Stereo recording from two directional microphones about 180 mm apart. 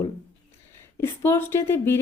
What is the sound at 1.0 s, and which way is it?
Speech, 15° left (ahead or behind).